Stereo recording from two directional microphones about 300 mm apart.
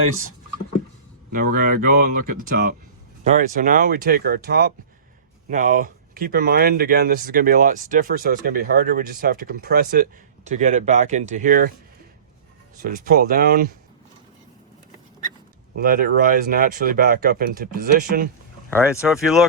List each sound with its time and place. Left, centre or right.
1.3 s speech: right
12.9 s speech: right
15.8 s speech: right
18.7 s speech: centre